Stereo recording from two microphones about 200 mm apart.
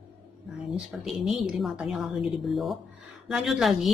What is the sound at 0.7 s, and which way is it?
Speech, centre (ahead or behind).